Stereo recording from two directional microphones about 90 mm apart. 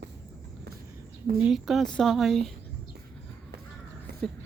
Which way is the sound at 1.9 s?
10° left (ahead or behind).